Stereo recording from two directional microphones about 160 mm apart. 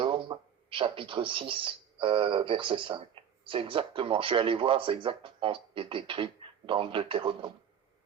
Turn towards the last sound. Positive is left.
turn(degrees=-35)  # may be behind; listen again after turning